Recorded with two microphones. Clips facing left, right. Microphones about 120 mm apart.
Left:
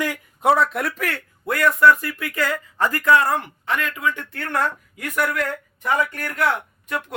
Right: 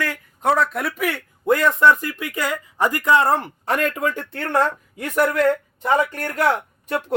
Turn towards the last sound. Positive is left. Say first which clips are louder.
# right 3 dB
turn(degrees=-35)  # may be behind; listen again after turning